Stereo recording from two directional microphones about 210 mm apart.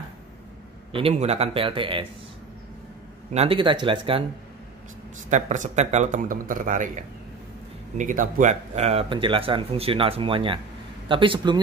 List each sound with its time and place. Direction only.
0.9 s speech: 30° right (ahead or behind)
3.3 s speech: 25° right (ahead or behind)
5.3 s a man's voice: 35° right (ahead or behind)